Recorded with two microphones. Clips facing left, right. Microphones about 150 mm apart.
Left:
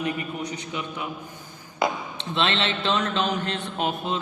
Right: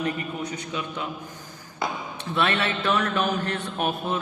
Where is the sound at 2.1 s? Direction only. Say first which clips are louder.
Right 1 dB; 25° left (ahead or behind).